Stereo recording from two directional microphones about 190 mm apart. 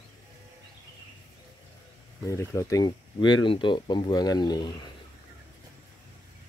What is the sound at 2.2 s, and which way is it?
Speech, 15° left (ahead or behind).